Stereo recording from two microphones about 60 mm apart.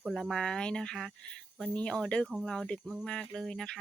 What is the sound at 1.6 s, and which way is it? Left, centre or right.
Speech, centre.